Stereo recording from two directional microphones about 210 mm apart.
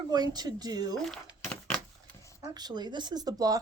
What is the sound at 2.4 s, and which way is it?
Speech, 20° right (ahead or behind).